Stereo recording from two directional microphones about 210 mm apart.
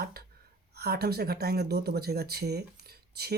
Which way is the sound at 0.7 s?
50° right (ahead or behind).